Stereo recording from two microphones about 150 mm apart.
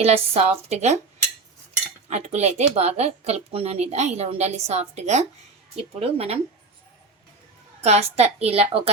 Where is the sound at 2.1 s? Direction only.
45° right (ahead or behind).